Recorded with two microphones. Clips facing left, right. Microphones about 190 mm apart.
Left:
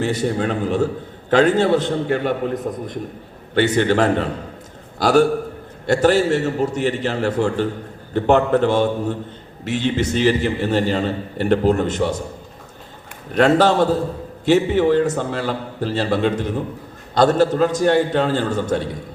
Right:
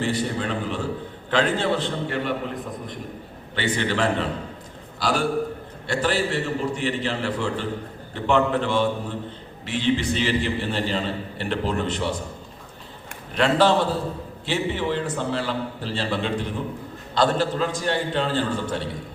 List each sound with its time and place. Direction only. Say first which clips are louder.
0.0 s a man's voice: left 5 dB; 45° left (ahead or behind)
13.3 s a man's voice: left 4 dB; 45° left (ahead or behind)